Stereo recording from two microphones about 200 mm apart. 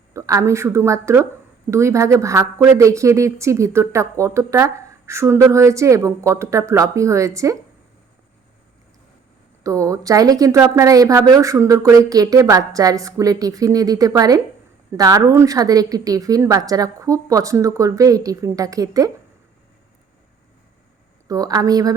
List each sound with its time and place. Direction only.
0.1 s a woman's voice: 15° right (ahead or behind)
9.6 s a woman's voice: 15° right (ahead or behind)
21.2 s a woman's voice: 15° right (ahead or behind)